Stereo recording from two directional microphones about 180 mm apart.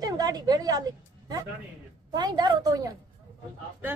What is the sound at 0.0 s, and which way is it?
Speech, 20° right (ahead or behind).